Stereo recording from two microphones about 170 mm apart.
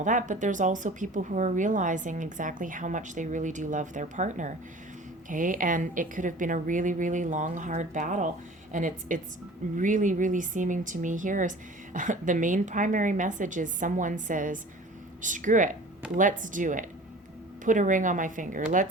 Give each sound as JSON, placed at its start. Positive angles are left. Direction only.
{"t": 0.0, "sound": "speech", "side_deg": -45}